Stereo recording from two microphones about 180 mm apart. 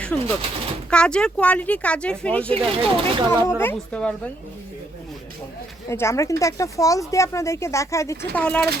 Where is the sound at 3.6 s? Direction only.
10° left (ahead or behind).